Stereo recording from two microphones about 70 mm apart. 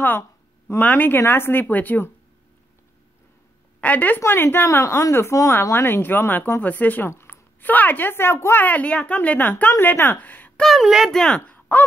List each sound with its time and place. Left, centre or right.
0.7 s speech: left
3.8 s speech: left
4.2 s speech: left
4.8 s speech: left
7.1 s a sound: left
7.6 s speech: left
10.6 s speech: centre
11.1 s speech: centre
11.4 s a sound: left